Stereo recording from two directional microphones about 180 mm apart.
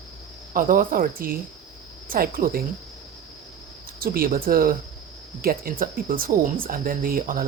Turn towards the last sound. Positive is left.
turn(degrees=-50)  # may be behind; listen again after turning